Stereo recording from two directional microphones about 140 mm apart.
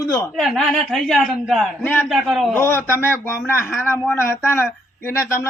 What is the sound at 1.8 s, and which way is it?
Speech, 15° left (ahead or behind).